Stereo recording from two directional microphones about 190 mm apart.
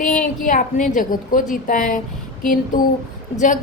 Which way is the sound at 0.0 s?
5° left (ahead or behind).